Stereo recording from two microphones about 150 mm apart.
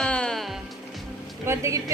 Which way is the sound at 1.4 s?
20° right (ahead or behind).